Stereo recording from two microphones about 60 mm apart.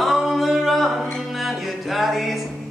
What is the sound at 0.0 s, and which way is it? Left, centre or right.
Music, centre.